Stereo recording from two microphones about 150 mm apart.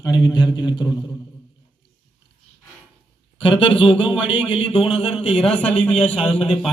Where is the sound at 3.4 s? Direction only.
35° left (ahead or behind).